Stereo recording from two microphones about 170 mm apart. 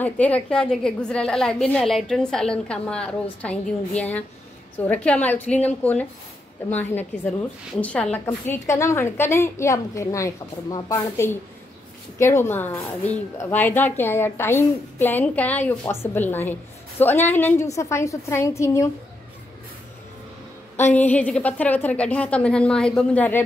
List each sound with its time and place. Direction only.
0.0 s a woman's voice: 10° left (ahead or behind)
4.7 s a woman's voice: 10° left (ahead or behind)
20.7 s a woman's voice: 10° left (ahead or behind)